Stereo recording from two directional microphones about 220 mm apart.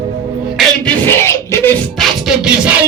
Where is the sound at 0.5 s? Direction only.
5° left (ahead or behind).